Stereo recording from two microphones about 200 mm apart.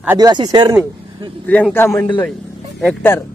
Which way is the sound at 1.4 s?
5° left (ahead or behind).